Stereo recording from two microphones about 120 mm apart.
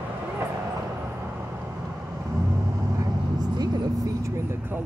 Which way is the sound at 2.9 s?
30° right (ahead or behind).